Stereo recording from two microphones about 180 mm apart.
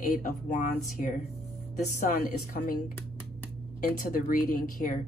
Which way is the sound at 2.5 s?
50° left (ahead or behind).